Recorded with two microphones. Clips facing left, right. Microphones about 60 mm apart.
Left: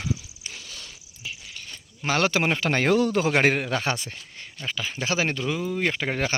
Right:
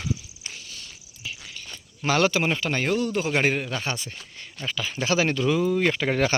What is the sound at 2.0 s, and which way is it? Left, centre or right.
Speech, left.